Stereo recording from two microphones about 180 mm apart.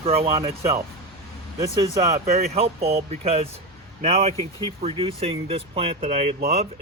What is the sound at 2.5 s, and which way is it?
Speech, 35° right (ahead or behind).